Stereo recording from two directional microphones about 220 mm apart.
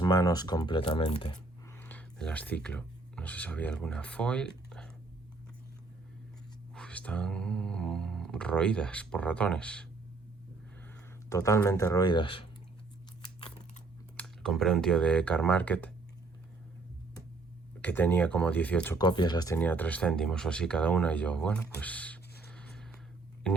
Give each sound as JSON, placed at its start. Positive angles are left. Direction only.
{"t": 0.0, "sound": "speech", "side_deg": 20}
{"t": 6.7, "sound": "speech", "side_deg": 5}
{"t": 11.3, "sound": "speech", "side_deg": 15}
{"t": 14.2, "sound": "speech", "side_deg": 0}
{"t": 17.8, "sound": "speech", "side_deg": 10}
{"t": 18.9, "sound": "speech", "side_deg": 20}
{"t": 19.5, "sound": "speech", "side_deg": 10}
{"t": 22.4, "sound": "a sound", "side_deg": 5}